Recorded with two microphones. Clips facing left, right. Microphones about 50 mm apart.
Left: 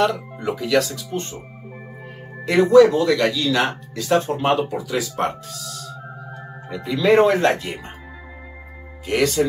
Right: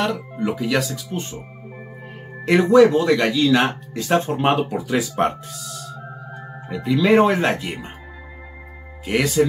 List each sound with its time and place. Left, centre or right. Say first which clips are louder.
0.0 s speech: left 2 dB; centre
2.4 s speech: left 1 dB; right
6.3 s speech: right 2 dB; centre
9.0 s speech: even; centre